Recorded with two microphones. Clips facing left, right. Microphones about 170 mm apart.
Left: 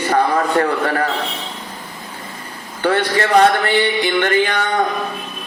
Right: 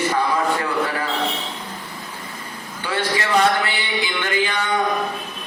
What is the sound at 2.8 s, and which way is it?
Music, 60° left (ahead or behind).